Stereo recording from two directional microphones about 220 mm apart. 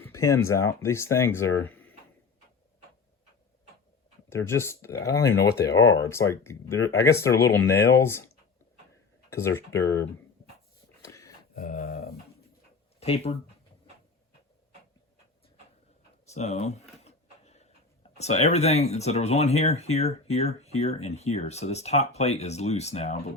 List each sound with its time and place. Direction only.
0.0 s speech: 10° left (ahead or behind)
1.6 s a sound: 10° left (ahead or behind)
4.3 s speech: 10° left (ahead or behind)
5.5 s speech: 45° left (ahead or behind)
5.9 s speech: 15° left (ahead or behind)
9.3 s speech: 10° left (ahead or behind)
11.0 s a sound: 15° left (ahead or behind)
11.5 s a sound: 40° left (ahead or behind)
13.0 s speech: 25° left (ahead or behind)
16.3 s speech: 30° left (ahead or behind)
17.0 s a sound: 30° left (ahead or behind)
18.2 s speech: 30° left (ahead or behind)